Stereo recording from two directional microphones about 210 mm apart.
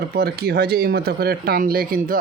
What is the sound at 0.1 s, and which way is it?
Speech, 45° right (ahead or behind).